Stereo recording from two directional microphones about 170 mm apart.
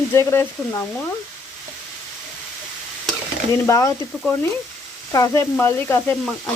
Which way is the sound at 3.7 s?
20° left (ahead or behind).